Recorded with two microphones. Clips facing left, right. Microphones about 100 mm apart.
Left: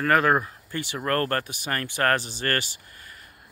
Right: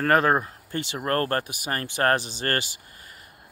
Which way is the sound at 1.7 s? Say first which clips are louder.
Right 1 dB; 25° right (ahead or behind).